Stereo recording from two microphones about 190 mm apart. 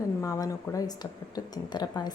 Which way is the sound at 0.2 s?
20° left (ahead or behind).